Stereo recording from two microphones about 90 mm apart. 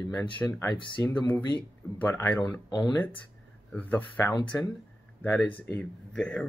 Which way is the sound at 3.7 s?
15° left (ahead or behind).